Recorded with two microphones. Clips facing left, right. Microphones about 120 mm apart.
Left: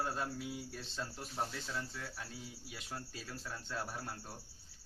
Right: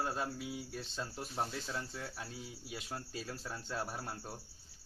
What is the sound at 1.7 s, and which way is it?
Speech, 25° right (ahead or behind).